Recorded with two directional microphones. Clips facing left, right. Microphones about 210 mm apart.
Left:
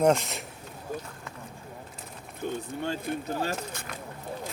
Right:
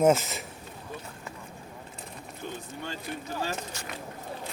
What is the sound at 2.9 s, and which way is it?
Speech, 55° left (ahead or behind).